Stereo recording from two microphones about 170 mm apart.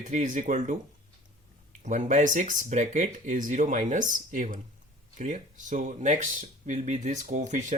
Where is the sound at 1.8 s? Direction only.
50° right (ahead or behind).